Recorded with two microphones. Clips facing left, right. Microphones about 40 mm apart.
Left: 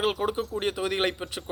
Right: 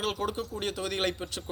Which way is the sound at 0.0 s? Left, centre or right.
Centre.